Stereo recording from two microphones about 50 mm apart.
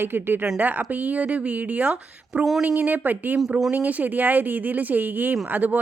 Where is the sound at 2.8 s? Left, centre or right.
Right.